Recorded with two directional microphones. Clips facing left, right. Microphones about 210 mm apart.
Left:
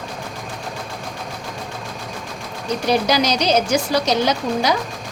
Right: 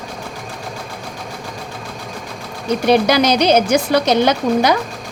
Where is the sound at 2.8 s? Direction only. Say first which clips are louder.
Right 5 dB; 60° right (ahead or behind).